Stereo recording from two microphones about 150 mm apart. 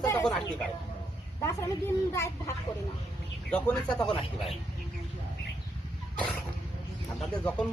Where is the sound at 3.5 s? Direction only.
5° left (ahead or behind).